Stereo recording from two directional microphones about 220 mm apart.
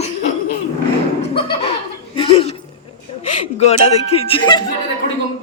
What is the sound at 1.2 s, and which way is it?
Music, 25° left (ahead or behind).